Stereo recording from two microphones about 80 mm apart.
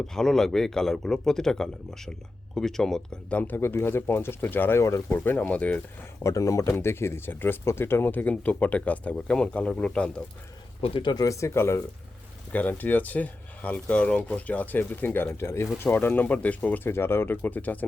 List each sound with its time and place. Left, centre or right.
0.1 s a man's voice: centre
3.2 s speech: left
5.1 s speech: left
6.2 s speech: left; by 10.1 s centre
10.8 s speech: left
11.2 s speech: left
12.5 s speech: left